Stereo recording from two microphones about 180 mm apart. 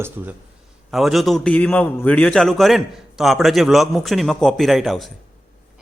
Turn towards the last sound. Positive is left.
turn(degrees=0)  # may be behind; listen again after turning